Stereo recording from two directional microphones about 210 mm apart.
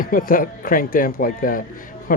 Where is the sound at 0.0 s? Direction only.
40° left (ahead or behind).